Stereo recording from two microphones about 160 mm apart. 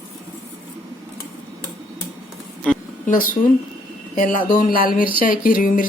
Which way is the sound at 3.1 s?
60° left (ahead or behind).